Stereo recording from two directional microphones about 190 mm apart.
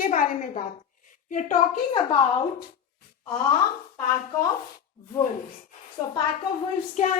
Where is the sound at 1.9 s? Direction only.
25° left (ahead or behind).